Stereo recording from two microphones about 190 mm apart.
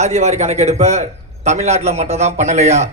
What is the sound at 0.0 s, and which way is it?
A man's voice, 35° right (ahead or behind).